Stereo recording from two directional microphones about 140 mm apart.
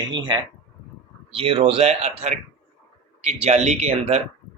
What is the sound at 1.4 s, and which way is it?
Speech, 45° right (ahead or behind).